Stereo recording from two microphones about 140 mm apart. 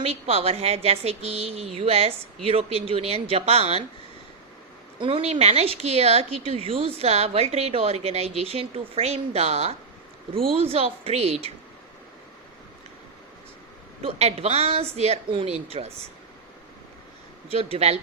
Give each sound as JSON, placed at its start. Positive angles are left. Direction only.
{"t": 0.0, "sound": "a woman's voice", "side_deg": -45}
{"t": 4.9, "sound": "a woman's voice", "side_deg": -40}
{"t": 14.0, "sound": "a woman's voice", "side_deg": -50}
{"t": 17.5, "sound": "a woman's voice", "side_deg": -45}